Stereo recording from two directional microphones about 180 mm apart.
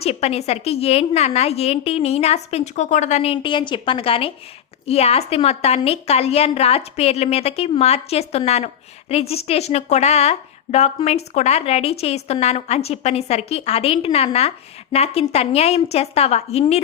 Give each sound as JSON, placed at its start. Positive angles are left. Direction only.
{"t": 0.0, "sound": "a woman's voice", "side_deg": 35}